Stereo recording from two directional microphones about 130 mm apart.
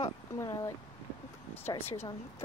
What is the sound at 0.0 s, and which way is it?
Speech, 25° left (ahead or behind).